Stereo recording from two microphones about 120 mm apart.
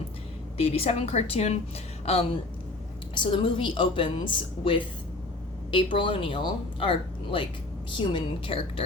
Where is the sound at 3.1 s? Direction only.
45° left (ahead or behind).